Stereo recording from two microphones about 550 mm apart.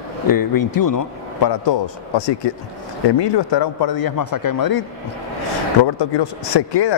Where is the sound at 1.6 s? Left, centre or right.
Left.